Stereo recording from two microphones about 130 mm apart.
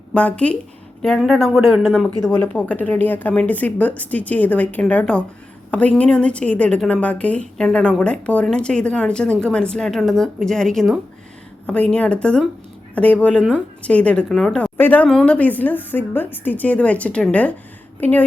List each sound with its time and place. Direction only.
0.1 s a woman's voice: 10° left (ahead or behind)